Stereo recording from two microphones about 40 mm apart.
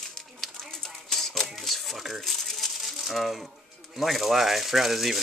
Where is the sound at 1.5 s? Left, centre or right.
Centre.